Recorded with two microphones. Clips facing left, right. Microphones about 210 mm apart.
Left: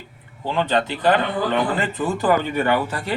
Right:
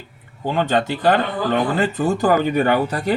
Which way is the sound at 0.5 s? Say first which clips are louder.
Right 2 dB; 45° right (ahead or behind).